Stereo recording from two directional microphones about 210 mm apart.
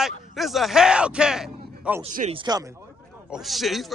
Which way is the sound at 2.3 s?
20° right (ahead or behind).